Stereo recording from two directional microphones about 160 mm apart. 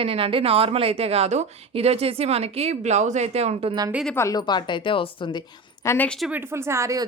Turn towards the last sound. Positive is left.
turn(degrees=-20)  # may be behind; listen again after turning